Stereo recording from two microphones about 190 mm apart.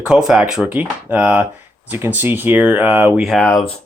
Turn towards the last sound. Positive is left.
turn(degrees=0)  # may be behind; listen again after turning